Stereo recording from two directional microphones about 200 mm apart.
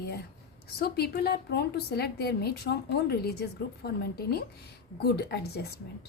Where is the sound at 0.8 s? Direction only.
50° left (ahead or behind).